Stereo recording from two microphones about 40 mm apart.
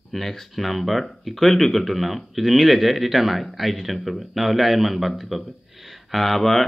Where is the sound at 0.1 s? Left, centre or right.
Centre.